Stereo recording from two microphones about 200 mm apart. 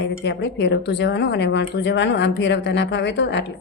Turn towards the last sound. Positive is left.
turn(degrees=60)  # may be behind; listen again after turning